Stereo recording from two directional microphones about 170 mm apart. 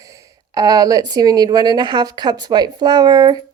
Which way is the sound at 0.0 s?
20° right (ahead or behind).